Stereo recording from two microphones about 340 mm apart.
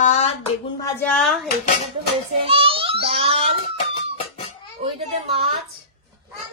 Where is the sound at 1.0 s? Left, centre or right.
Centre.